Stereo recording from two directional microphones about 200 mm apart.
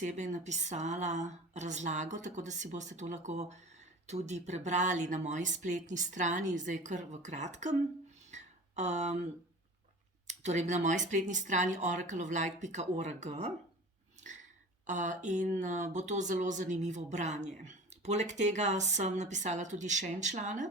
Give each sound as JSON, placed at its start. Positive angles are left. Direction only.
{"t": 0.0, "sound": "speech", "side_deg": -35}
{"t": 8.3, "sound": "a sound", "side_deg": -35}
{"t": 10.2, "sound": "speech", "side_deg": -35}
{"t": 14.8, "sound": "speech", "side_deg": -40}